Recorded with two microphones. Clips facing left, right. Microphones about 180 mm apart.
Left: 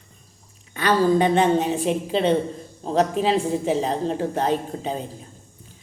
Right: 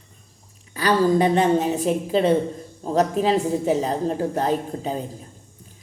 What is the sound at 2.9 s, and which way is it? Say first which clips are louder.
Speech: right 1 dB; 40° right (ahead or behind).